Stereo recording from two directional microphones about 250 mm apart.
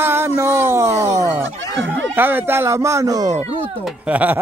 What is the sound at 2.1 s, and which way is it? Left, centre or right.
Speech, centre.